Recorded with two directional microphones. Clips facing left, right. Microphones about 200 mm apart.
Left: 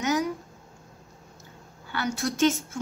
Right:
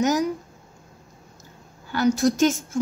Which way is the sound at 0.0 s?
40° right (ahead or behind).